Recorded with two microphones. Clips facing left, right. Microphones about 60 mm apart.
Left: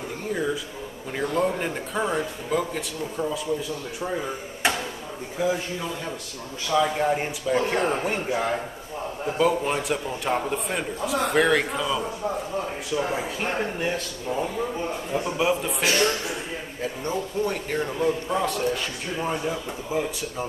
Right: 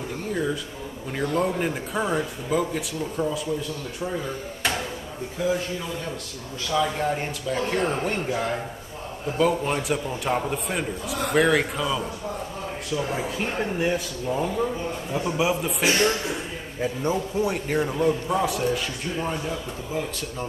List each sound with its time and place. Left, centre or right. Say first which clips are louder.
1.1 s a man's voice: even; centre
4.0 s a man's voice: even; centre
13.1 s a man's voice: even; centre
15.8 s a man's voice: right 3 dB; centre
19.1 s speech: left 3 dB; centre